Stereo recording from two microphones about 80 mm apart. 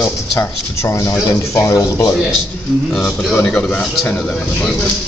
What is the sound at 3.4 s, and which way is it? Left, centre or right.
Speech, centre.